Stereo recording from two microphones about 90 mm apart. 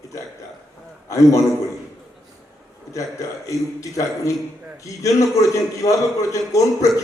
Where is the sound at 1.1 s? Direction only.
35° left (ahead or behind).